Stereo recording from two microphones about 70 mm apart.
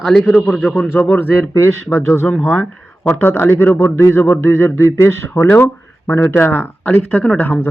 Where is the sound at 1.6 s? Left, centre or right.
Left.